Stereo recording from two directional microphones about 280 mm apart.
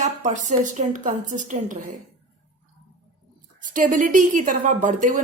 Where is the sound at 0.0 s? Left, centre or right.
Right.